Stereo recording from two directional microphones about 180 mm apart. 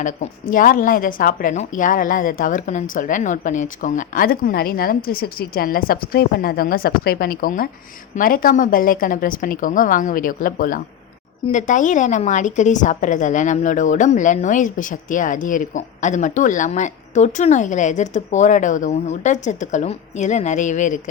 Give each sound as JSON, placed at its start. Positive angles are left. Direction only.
{"t": 0.0, "sound": "a woman's voice", "side_deg": 45}